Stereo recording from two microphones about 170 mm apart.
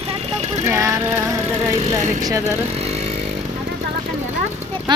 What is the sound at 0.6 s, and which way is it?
Vehicle, 15° right (ahead or behind).